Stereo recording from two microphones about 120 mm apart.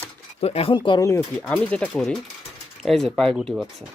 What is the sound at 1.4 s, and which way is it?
Speech, 10° left (ahead or behind).